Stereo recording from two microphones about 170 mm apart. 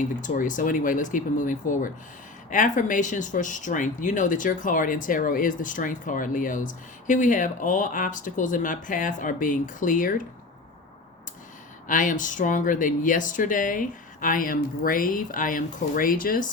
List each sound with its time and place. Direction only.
0.0 s speech: 50° left (ahead or behind)
11.9 s speech: 50° left (ahead or behind)